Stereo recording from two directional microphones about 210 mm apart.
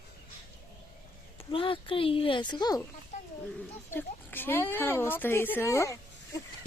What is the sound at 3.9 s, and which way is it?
Speech, 10° left (ahead or behind).